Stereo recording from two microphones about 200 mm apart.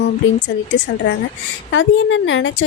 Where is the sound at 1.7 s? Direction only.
70° left (ahead or behind).